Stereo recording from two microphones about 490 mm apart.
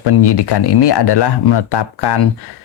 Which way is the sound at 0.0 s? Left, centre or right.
Left.